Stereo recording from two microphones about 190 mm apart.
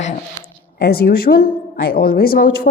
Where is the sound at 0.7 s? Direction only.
55° left (ahead or behind).